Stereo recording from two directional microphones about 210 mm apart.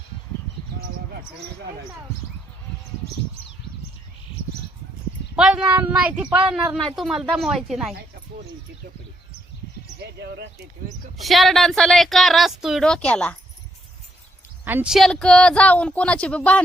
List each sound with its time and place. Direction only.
5.4 s speech: 5° right (ahead or behind)
10.0 s speech: 50° right (ahead or behind)
11.2 s speech: centre (ahead or behind)
14.6 s speech: 10° right (ahead or behind)